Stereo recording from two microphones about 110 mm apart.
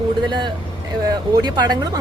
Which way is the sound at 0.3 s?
45° right (ahead or behind).